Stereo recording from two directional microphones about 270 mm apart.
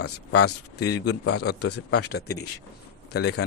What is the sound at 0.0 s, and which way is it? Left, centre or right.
Speech, left.